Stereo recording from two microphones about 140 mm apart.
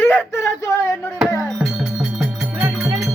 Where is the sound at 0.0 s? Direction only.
15° left (ahead or behind).